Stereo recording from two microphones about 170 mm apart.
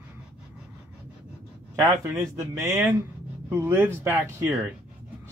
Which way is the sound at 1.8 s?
20° right (ahead or behind).